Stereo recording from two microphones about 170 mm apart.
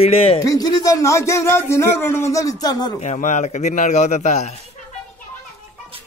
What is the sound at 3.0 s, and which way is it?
A man's voice, 45° left (ahead or behind).